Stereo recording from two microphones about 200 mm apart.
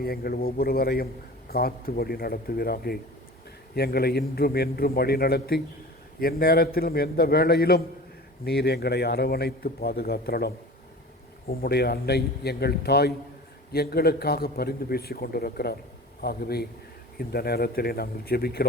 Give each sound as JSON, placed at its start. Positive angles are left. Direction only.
{"t": 0.0, "sound": "speech", "side_deg": 50}